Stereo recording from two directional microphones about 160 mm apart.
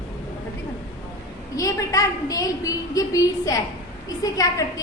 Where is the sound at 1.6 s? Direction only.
20° left (ahead or behind).